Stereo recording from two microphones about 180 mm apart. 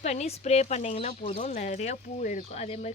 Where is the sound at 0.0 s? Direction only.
35° left (ahead or behind).